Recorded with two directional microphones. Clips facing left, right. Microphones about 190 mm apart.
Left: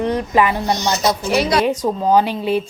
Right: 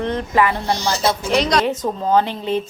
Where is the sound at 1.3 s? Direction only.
5° left (ahead or behind).